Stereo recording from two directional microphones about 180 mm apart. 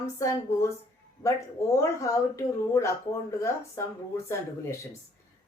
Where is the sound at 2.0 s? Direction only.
20° left (ahead or behind).